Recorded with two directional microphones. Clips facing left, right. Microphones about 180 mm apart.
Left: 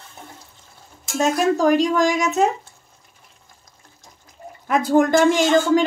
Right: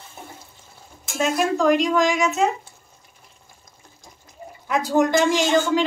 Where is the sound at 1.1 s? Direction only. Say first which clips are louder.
Left 3 dB; 40° left (ahead or behind).